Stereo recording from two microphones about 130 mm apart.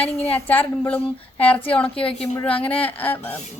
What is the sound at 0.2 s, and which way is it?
Speech, 10° left (ahead or behind).